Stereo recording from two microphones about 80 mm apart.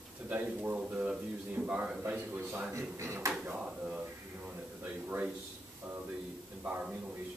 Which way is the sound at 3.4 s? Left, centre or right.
Centre.